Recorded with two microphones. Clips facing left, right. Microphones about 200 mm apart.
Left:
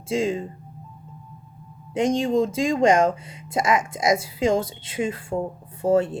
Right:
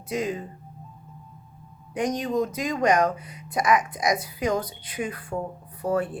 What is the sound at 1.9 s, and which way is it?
Speech, 25° left (ahead or behind).